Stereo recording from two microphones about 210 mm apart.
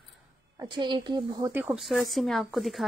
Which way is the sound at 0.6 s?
20° right (ahead or behind).